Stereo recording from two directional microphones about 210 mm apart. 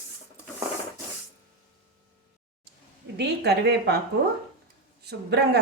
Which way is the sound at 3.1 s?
50° right (ahead or behind).